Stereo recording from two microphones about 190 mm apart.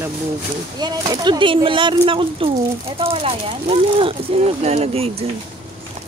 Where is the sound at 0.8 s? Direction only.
25° right (ahead or behind).